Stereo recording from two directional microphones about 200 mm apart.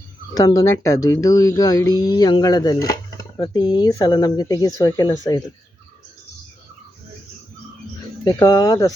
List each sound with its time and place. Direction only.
0.3 s speech: 15° left (ahead or behind)
8.2 s speech: 20° left (ahead or behind)